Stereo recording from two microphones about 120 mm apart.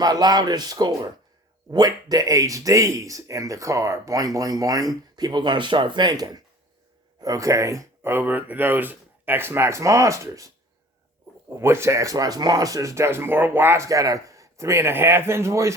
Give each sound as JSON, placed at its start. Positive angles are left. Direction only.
{"t": 0.0, "sound": "speech", "side_deg": -35}